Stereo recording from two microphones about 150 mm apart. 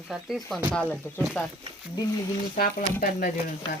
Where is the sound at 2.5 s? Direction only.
65° left (ahead or behind).